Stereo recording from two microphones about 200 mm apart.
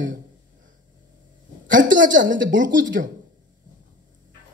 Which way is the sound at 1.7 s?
40° right (ahead or behind).